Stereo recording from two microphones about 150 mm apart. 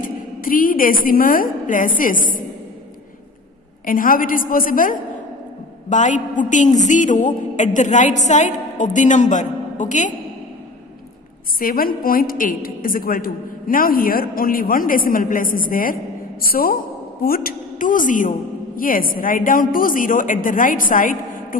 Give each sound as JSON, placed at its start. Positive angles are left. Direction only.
{"t": 0.0, "sound": "a woman's voice", "side_deg": 70}
{"t": 3.8, "sound": "a woman's voice", "side_deg": 70}
{"t": 5.9, "sound": "a woman's voice", "side_deg": 55}
{"t": 11.6, "sound": "a woman's voice", "side_deg": 75}